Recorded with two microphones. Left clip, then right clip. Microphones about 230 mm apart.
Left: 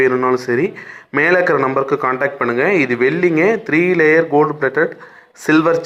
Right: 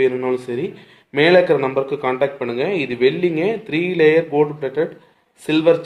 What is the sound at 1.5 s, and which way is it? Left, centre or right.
A man's voice, left.